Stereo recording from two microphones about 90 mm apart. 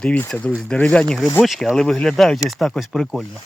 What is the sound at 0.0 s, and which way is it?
Speech, 15° left (ahead or behind).